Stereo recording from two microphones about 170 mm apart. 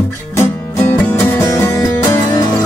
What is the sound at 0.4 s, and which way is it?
Music, 15° left (ahead or behind).